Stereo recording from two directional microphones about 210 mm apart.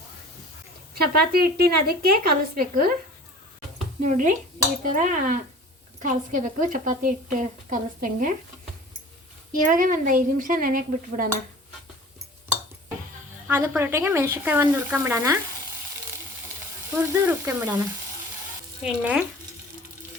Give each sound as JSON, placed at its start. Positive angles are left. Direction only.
{"t": 0.9, "sound": "a woman's voice", "side_deg": -45}
{"t": 4.0, "sound": "a woman's voice", "side_deg": -40}
{"t": 9.6, "sound": "a woman's voice", "side_deg": -40}
{"t": 13.5, "sound": "frying", "side_deg": -10}
{"t": 17.0, "sound": "frying", "side_deg": -10}
{"t": 18.8, "sound": "stir", "side_deg": -5}